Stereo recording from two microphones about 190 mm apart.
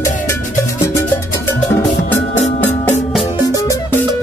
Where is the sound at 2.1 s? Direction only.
10° left (ahead or behind).